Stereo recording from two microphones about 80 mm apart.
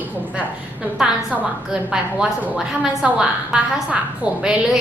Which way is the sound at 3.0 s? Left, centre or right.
Centre.